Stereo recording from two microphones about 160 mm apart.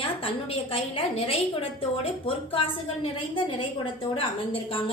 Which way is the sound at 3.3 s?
30° left (ahead or behind).